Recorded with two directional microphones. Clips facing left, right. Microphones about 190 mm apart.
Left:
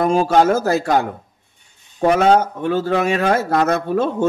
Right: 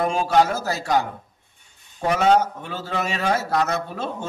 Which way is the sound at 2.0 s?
55° left (ahead or behind).